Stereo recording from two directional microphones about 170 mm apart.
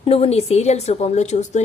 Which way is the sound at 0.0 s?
35° left (ahead or behind).